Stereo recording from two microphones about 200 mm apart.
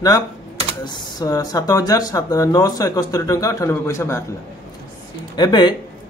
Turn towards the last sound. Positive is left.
turn(degrees=20)  # may be behind; listen again after turning